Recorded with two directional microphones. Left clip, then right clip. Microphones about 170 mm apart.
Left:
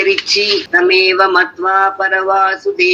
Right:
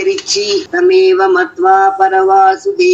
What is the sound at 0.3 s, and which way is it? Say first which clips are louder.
Mantra: left 1 dB; 15° left (ahead or behind).